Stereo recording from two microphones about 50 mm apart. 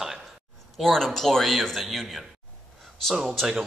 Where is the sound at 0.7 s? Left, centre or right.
Centre.